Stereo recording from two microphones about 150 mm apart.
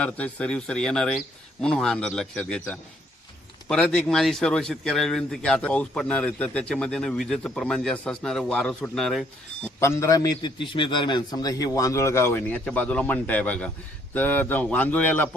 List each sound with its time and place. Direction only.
0.0 s speech: 5° left (ahead or behind)
9.8 s a man's voice: 20° left (ahead or behind)